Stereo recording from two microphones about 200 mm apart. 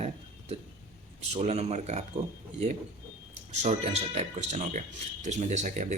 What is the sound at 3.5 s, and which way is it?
Speech, 35° right (ahead or behind).